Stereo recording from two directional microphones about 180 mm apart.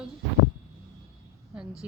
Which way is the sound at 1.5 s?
5° right (ahead or behind).